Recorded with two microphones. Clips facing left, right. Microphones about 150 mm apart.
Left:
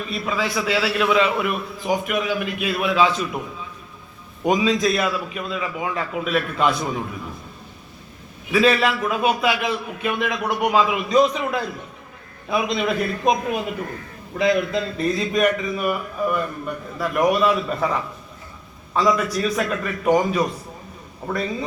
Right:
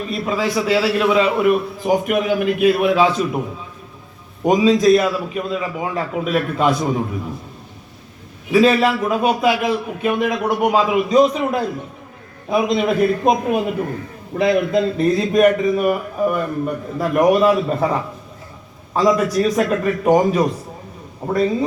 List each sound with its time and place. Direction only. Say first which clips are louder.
0.0 s a man's voice: right 4 dB; 40° right (ahead or behind)
4.4 s a man's voice: right 6 dB; 40° right (ahead or behind)
8.5 s a man's voice: right 4 dB; 35° right (ahead or behind)
14.3 s a man's voice: right 4 dB; 50° right (ahead or behind); by 21.5 s 35° right (ahead or behind)